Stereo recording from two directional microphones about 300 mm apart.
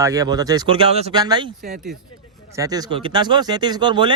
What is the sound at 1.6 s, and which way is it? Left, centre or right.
Speech, right.